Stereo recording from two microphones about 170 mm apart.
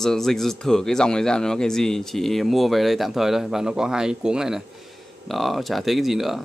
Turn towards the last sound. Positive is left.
turn(degrees=0)  # may be behind; listen again after turning